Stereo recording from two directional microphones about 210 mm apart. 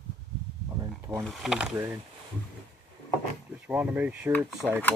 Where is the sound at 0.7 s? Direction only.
10° right (ahead or behind).